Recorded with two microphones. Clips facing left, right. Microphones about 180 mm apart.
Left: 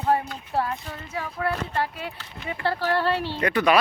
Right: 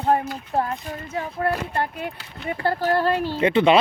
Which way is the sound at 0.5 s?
45° right (ahead or behind).